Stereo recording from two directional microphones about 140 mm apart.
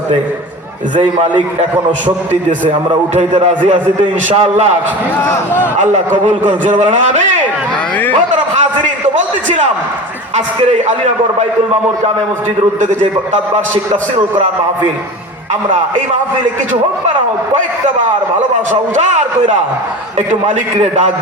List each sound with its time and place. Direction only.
2.9 s a man's voice: 35° right (ahead or behind)
4.0 s a man's voice: 50° right (ahead or behind)
5.8 s a man's voice: 60° right (ahead or behind)
9.1 s a man's voice: 60° right (ahead or behind)
11.3 s a man's voice: 50° right (ahead or behind)
12.8 s a man's voice: 65° right (ahead or behind)
18.7 s a man's voice: 65° right (ahead or behind)
20.4 s a man's voice: 50° right (ahead or behind)